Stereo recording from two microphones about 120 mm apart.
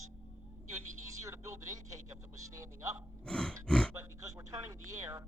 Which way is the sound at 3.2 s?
5° left (ahead or behind).